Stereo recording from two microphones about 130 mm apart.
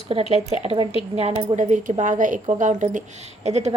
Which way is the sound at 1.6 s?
75° right (ahead or behind).